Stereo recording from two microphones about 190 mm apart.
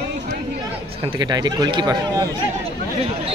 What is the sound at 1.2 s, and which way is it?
Speech, 20° right (ahead or behind).